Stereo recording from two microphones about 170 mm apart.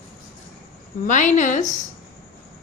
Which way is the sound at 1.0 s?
45° left (ahead or behind).